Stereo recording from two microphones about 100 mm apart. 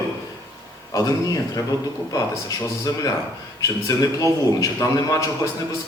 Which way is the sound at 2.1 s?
35° left (ahead or behind).